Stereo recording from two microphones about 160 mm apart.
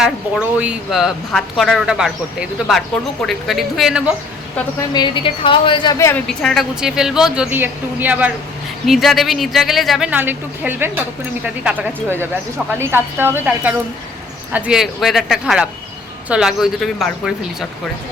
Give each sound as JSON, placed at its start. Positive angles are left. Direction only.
{"t": 0.0, "sound": "speech", "side_deg": -5}
{"t": 4.9, "sound": "a woman's voice", "side_deg": 30}
{"t": 6.0, "sound": "a woman's voice", "side_deg": 15}
{"t": 6.2, "sound": "a woman's voice", "side_deg": 5}